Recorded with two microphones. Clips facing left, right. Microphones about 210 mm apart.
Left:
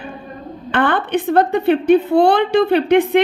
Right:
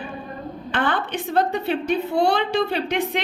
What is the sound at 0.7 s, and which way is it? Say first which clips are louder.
A woman's voice: left 7 dB; 55° left (ahead or behind).